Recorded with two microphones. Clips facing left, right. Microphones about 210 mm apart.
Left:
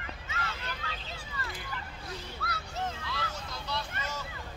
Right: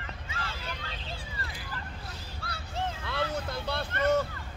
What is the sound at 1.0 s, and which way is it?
Vehicle, 30° right (ahead or behind).